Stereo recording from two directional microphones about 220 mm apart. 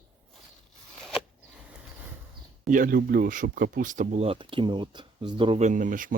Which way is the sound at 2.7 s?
40° right (ahead or behind).